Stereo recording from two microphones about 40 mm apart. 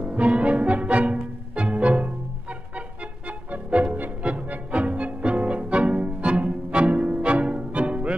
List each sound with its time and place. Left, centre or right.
0.0 s music: right
3.7 s music: right